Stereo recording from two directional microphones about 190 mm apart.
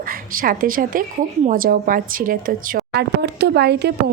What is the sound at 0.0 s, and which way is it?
A woman's voice, 50° right (ahead or behind).